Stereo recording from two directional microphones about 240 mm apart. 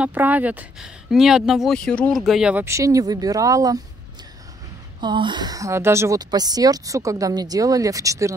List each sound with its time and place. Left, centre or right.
0.0 s speech: centre
5.0 s speech: centre